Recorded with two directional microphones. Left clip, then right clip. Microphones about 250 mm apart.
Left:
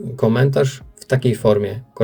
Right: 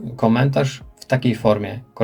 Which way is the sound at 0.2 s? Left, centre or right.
Left.